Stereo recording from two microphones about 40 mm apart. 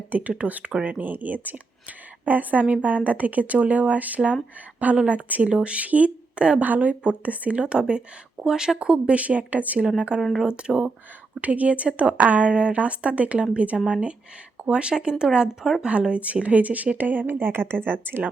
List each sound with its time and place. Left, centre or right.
0.1 s speech: right
0.7 s speech: right
0.9 s speech: right
6.6 s speech: right
7.6 s speech: right
10.1 s speech: right
11.3 s speech: right
12.5 s speech: right
17.4 s speech: right